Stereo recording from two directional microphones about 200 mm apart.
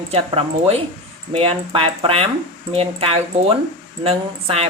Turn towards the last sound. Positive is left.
turn(degrees=-30)  # may be behind; listen again after turning